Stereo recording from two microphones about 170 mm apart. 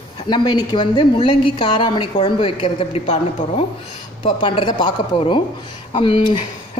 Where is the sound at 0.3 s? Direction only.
25° left (ahead or behind).